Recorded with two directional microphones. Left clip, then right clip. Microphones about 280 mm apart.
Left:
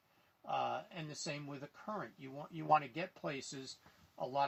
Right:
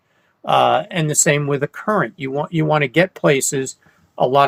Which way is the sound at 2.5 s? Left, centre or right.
Right.